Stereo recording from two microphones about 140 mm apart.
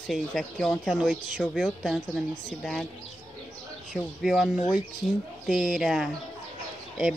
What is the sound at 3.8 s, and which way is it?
Speech, centre (ahead or behind).